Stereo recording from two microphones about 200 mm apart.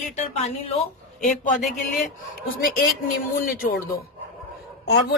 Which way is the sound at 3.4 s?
45° left (ahead or behind).